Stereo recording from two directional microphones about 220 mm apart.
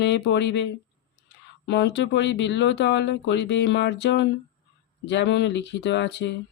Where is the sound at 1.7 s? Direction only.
50° left (ahead or behind).